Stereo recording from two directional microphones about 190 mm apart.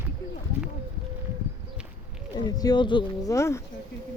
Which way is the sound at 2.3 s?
20° left (ahead or behind).